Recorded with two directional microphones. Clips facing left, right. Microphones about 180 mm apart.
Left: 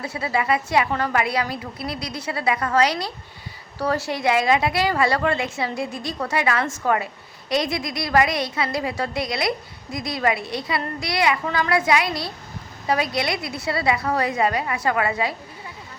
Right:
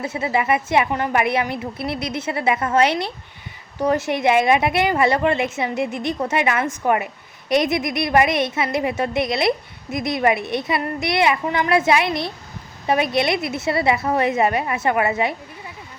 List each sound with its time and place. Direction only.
0.0 s a woman's voice: 20° right (ahead or behind)